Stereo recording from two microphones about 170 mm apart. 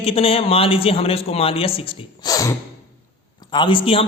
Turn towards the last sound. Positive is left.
turn(degrees=35)  # may be behind; listen again after turning